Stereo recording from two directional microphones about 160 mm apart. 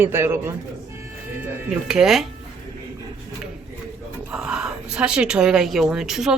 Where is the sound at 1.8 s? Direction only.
5° right (ahead or behind).